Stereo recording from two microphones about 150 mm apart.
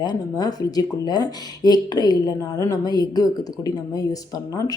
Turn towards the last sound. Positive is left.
turn(degrees=25)  # may be behind; listen again after turning